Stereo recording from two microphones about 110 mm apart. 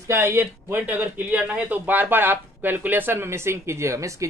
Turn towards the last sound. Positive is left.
turn(degrees=-30)  # may be behind; listen again after turning